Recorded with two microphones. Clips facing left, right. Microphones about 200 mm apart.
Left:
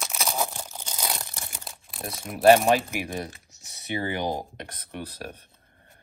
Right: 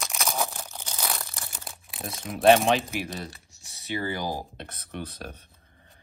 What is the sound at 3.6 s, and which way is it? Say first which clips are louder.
Speech: left 1 dB; 20° left (ahead or behind).